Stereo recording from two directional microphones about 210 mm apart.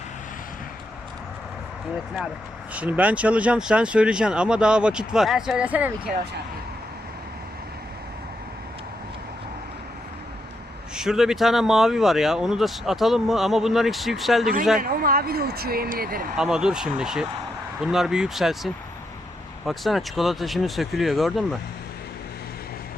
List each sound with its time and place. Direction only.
2.7 s speech: 5° right (ahead or behind)
10.9 s speech: 5° right (ahead or behind)
14.8 s speech: 45° right (ahead or behind)
16.4 s speech: 5° right (ahead or behind)